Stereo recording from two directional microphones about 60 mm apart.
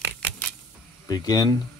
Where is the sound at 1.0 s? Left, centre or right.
Left.